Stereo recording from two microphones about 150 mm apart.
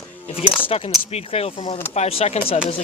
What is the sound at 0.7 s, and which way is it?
Speech, 40° left (ahead or behind).